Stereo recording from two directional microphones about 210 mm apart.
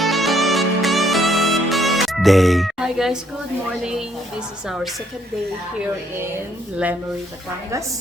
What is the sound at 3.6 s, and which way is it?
Speech, 5° right (ahead or behind).